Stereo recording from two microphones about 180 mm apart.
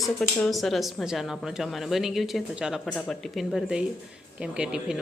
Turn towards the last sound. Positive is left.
turn(degrees=-5)  # may be behind; listen again after turning